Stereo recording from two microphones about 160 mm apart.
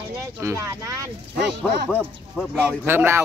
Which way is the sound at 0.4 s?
15° right (ahead or behind).